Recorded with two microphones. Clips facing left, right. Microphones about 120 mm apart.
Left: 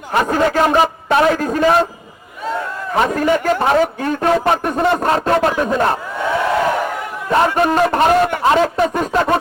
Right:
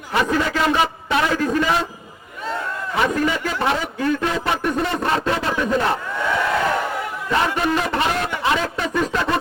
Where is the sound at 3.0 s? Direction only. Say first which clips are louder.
Left 5 dB; 45° left (ahead or behind).